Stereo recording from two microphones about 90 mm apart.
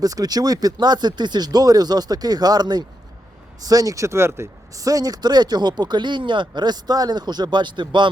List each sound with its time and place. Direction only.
0.0 s speech: 45° right (ahead or behind); by 8.1 s 60° right (ahead or behind)